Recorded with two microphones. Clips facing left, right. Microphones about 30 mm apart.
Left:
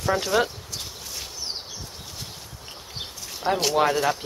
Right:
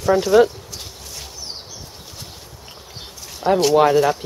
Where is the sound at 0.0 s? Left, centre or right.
Centre.